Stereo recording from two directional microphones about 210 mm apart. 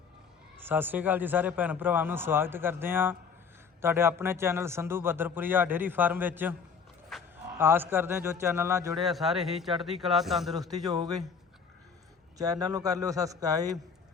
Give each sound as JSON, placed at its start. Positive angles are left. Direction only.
{"t": 0.6, "sound": "a man's voice", "side_deg": -10}
{"t": 7.1, "sound": "a sound", "side_deg": 0}
{"t": 7.6, "sound": "a man's voice", "side_deg": -10}
{"t": 9.0, "sound": "a man's voice", "side_deg": 0}
{"t": 10.8, "sound": "a man's voice", "side_deg": -20}
{"t": 12.4, "sound": "a man's voice", "side_deg": -15}